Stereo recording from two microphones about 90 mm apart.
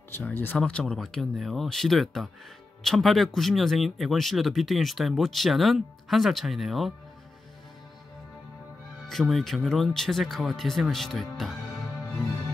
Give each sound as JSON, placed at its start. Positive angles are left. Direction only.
{"t": 0.1, "sound": "speech", "side_deg": 20}
{"t": 0.9, "sound": "speech", "side_deg": 0}
{"t": 9.1, "sound": "speech", "side_deg": 0}